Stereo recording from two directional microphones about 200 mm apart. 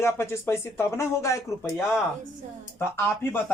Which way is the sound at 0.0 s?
15° left (ahead or behind).